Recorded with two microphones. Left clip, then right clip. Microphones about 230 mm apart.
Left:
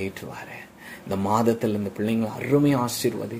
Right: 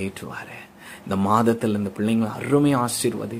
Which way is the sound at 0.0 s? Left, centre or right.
Centre.